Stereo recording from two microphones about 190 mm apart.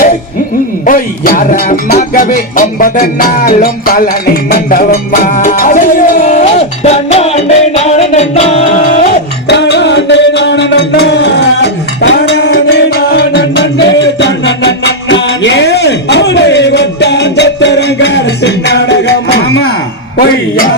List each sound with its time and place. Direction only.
0.9 s music: 45° left (ahead or behind)
9.5 s music: 65° left (ahead or behind)